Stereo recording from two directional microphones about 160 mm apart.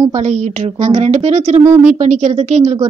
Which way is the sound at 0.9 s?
40° right (ahead or behind).